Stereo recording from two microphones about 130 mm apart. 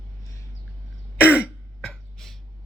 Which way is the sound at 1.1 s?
10° right (ahead or behind).